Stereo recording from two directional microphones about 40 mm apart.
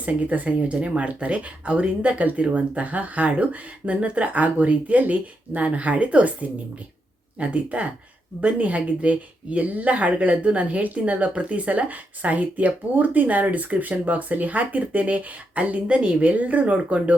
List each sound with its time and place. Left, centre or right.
0.0 s speech: right